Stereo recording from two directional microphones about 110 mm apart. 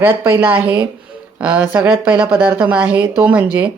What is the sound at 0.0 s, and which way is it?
Speech, 15° right (ahead or behind).